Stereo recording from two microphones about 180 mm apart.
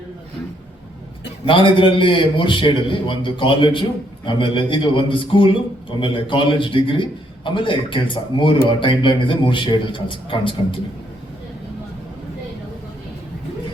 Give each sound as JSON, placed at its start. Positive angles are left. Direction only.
{"t": 1.5, "sound": "a man's voice", "side_deg": 30}